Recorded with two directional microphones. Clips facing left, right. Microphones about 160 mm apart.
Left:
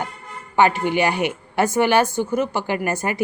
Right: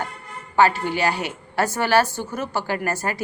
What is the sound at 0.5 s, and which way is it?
A woman's voice, 20° left (ahead or behind).